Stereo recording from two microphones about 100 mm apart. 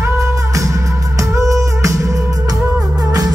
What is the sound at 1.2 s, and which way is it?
Music, 30° right (ahead or behind).